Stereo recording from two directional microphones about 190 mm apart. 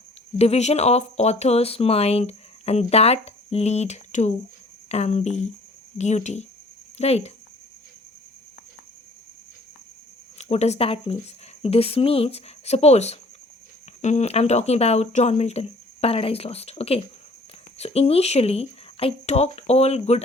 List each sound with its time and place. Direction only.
0.3 s speech: 35° left (ahead or behind)
10.3 s speech: 35° left (ahead or behind)